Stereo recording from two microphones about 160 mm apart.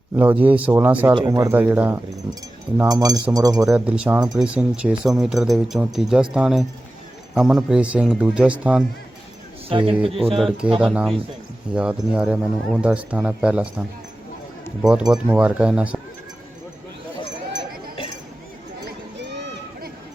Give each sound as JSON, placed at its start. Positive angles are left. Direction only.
{"t": 0.2, "sound": "speech", "side_deg": -10}
{"t": 1.1, "sound": "speech", "side_deg": -25}
{"t": 2.9, "sound": "speech", "side_deg": -25}
{"t": 3.7, "sound": "speech", "side_deg": -5}
{"t": 9.6, "sound": "a man's voice", "side_deg": -35}
{"t": 10.3, "sound": "speech", "side_deg": 0}
{"t": 19.1, "sound": "a sound", "side_deg": -90}